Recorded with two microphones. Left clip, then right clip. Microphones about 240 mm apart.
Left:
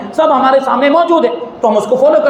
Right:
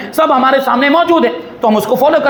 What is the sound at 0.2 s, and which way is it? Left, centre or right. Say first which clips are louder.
A man's voice: left 1 dB; right.